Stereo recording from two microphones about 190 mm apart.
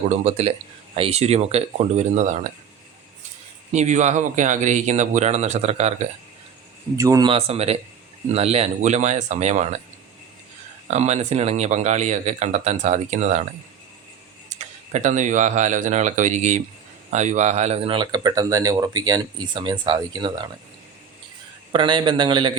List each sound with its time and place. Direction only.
0.1 s speech: 35° right (ahead or behind)
3.7 s speech: 40° right (ahead or behind)
6.9 s a man's voice: 15° right (ahead or behind)
7.3 s speech: 30° right (ahead or behind)
10.8 s speech: 35° right (ahead or behind)
14.5 s a man's voice: 40° right (ahead or behind); by 20.5 s 25° right (ahead or behind)
21.7 s a man's voice: 25° right (ahead or behind)